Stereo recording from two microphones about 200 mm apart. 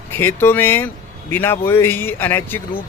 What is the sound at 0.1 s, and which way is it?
Speech, 10° left (ahead or behind).